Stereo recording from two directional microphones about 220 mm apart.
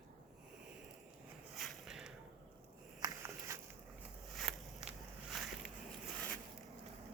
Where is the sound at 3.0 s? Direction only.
20° right (ahead or behind).